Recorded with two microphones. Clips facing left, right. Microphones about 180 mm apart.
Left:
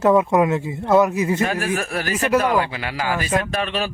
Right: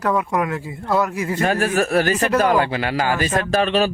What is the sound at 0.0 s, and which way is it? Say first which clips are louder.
Speech: left 5 dB; 25° left (ahead or behind).